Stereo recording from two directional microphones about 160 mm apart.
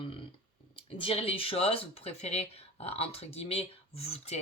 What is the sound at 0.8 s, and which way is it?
Speech, 35° left (ahead or behind).